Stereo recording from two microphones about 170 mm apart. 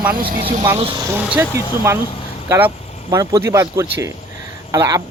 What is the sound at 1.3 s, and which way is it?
Speech, 10° right (ahead or behind).